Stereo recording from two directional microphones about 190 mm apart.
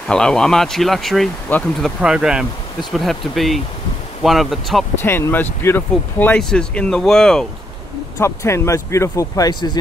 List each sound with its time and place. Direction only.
0.1 s speech: 5° left (ahead or behind)
5.0 s speech: 10° left (ahead or behind)
8.2 s speech: 15° left (ahead or behind)